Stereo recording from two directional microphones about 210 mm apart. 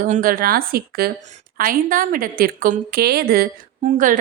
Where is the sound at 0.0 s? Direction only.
40° right (ahead or behind).